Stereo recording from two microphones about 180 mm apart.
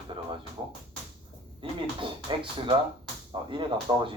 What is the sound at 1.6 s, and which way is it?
Speech, 25° right (ahead or behind).